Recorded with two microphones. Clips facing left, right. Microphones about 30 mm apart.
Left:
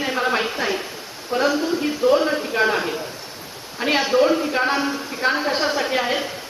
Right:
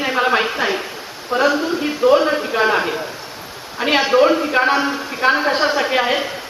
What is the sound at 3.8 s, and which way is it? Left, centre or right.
Speech, right.